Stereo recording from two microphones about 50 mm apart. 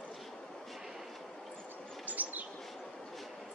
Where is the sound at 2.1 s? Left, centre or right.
Right.